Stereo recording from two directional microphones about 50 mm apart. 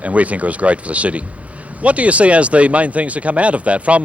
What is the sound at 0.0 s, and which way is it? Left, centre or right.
Speech, right.